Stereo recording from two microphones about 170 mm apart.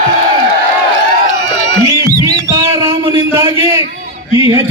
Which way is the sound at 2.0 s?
20° right (ahead or behind).